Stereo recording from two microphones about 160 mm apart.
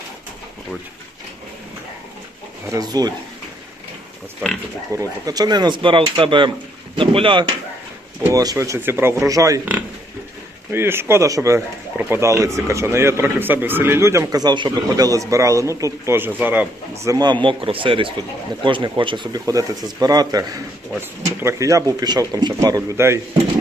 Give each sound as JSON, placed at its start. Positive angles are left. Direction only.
{"t": 2.6, "sound": "speech", "side_deg": -25}
{"t": 4.9, "sound": "speech", "side_deg": -25}
{"t": 8.2, "sound": "speech", "side_deg": -20}
{"t": 10.7, "sound": "speech", "side_deg": -15}
{"t": 17.0, "sound": "speech", "side_deg": -25}